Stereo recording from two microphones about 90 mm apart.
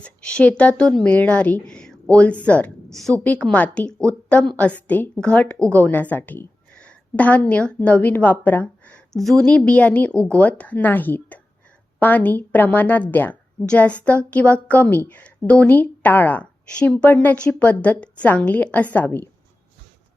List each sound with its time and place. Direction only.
0.0 s a woman's voice: 10° left (ahead or behind)
2.9 s a woman's voice: 5° left (ahead or behind)
9.1 s a woman's voice: 5° left (ahead or behind); by 19.3 s 20° left (ahead or behind)